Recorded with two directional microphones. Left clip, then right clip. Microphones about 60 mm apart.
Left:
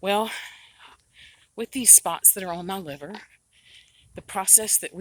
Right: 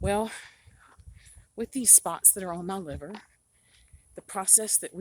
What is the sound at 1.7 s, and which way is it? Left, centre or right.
A woman's voice, centre.